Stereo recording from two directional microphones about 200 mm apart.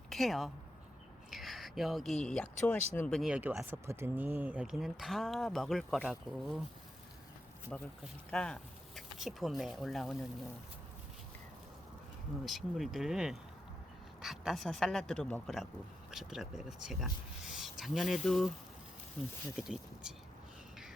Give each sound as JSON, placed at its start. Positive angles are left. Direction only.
{"t": 0.1, "sound": "speech", "side_deg": 0}
{"t": 3.2, "sound": "speech", "side_deg": -5}
{"t": 7.7, "sound": "speech", "side_deg": 5}
{"t": 12.5, "sound": "speech", "side_deg": 0}
{"t": 19.5, "sound": "speech", "side_deg": -5}